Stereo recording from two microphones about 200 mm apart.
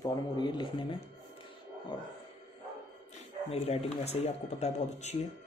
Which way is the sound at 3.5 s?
30° left (ahead or behind).